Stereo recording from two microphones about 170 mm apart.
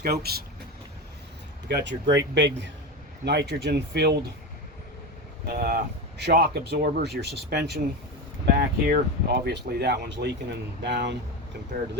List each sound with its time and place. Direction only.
0.0 s speech: 65° right (ahead or behind)
1.6 s a man's voice: 85° right
3.2 s speech: 75° right (ahead or behind)
5.5 s speech: 60° right (ahead or behind); by 11.2 s 85° right